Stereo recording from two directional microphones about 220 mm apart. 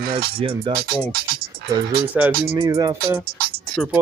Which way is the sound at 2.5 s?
15° right (ahead or behind).